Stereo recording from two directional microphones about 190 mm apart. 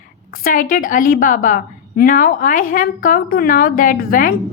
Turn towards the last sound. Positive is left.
turn(degrees=50)  # may be behind; listen again after turning